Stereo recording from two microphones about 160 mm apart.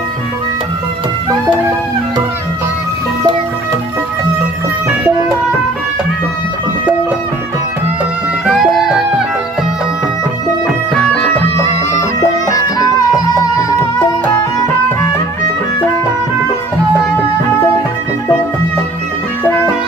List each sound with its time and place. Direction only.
8.4 s music: centre (ahead or behind)
10.9 s music: 10° left (ahead or behind)
12.5 s music: 25° left (ahead or behind)